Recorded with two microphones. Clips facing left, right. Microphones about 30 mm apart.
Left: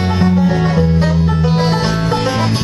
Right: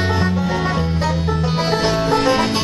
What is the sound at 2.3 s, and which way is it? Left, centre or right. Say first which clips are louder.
Music: left 1 dB; right.